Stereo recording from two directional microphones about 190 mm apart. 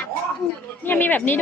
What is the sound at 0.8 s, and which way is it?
Speech, 10° left (ahead or behind).